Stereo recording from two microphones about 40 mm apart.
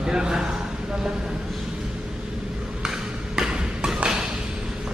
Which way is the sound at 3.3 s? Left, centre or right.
Centre.